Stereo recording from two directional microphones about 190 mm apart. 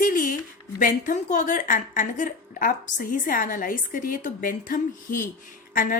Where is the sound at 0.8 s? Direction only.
40° left (ahead or behind).